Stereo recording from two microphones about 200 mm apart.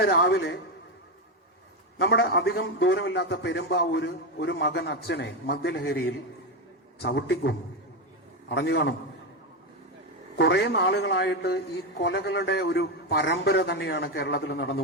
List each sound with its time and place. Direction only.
0.0 s a man's voice: 55° left (ahead or behind)
2.0 s a man's voice: 55° left (ahead or behind)
10.3 s a man's voice: 55° left (ahead or behind)